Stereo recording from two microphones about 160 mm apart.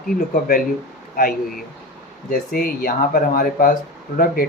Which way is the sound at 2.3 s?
65° left (ahead or behind).